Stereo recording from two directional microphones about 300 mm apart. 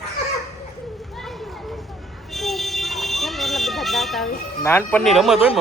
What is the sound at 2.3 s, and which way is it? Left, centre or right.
Vehicle, centre.